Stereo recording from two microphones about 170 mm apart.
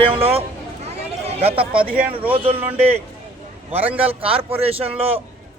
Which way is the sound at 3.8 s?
10° right (ahead or behind).